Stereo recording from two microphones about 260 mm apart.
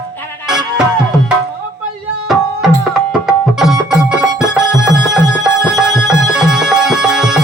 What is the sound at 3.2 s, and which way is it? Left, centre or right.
Tabla, centre.